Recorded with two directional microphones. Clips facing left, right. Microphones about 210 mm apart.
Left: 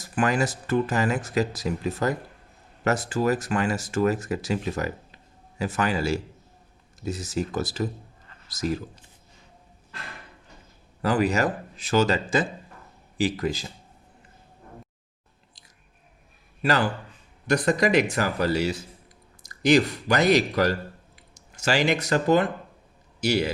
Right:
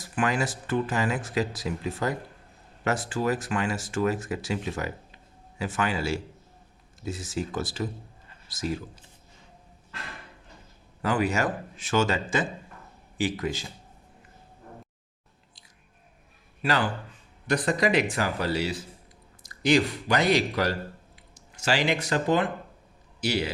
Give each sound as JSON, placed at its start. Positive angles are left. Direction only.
{"t": 0.0, "sound": "speech", "side_deg": 40}
{"t": 11.0, "sound": "speech", "side_deg": 35}
{"t": 17.4, "sound": "speech", "side_deg": 45}